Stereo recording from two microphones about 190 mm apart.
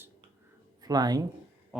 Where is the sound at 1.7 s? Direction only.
5° right (ahead or behind).